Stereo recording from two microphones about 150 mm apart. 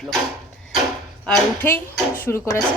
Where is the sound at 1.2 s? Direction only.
5° left (ahead or behind).